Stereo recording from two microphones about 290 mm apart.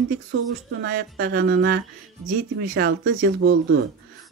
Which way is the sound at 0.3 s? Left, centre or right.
Right.